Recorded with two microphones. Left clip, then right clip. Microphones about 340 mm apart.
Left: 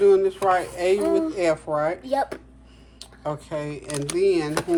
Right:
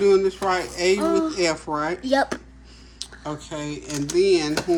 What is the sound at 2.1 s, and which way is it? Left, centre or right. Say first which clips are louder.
Speech: right 3 dB; right.